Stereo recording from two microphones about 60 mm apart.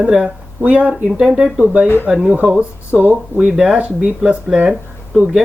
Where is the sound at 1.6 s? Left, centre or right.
Right.